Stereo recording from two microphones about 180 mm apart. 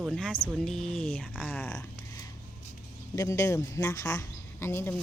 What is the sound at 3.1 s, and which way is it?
Speech, 15° left (ahead or behind).